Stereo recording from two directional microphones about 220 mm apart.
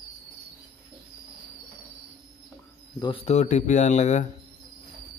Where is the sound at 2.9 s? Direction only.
20° left (ahead or behind).